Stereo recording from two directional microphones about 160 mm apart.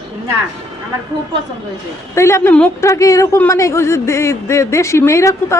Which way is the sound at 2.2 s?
15° left (ahead or behind).